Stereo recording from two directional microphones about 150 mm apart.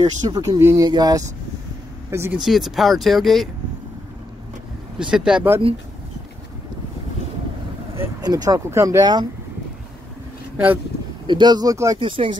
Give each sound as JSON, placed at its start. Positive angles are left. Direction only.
{"t": 0.0, "sound": "speech", "side_deg": -25}
{"t": 2.3, "sound": "speech", "side_deg": 0}
{"t": 4.9, "sound": "speech", "side_deg": -5}
{"t": 7.9, "sound": "speech", "side_deg": -20}
{"t": 11.2, "sound": "speech", "side_deg": -30}
{"t": 12.0, "sound": "speech", "side_deg": -35}